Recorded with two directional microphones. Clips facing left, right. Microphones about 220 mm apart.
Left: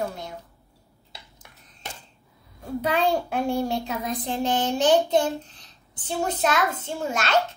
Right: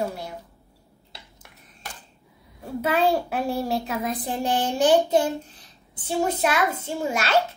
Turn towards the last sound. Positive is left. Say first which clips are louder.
# right 1 dB
turn(degrees=-10)  # may be behind; listen again after turning